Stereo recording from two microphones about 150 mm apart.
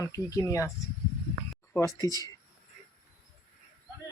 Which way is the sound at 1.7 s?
25° left (ahead or behind).